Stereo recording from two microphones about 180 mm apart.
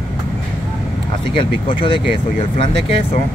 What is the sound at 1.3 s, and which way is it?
Speech, 30° left (ahead or behind).